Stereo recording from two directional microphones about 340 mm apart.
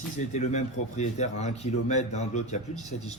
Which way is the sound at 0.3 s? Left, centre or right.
Centre.